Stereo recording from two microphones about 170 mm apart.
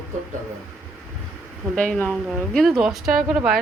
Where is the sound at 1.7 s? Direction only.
5° left (ahead or behind).